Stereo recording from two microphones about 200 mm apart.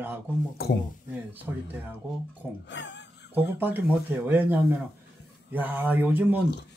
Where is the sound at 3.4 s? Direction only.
10° right (ahead or behind).